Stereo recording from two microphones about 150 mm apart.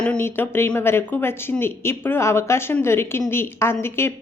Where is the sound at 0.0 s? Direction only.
10° left (ahead or behind).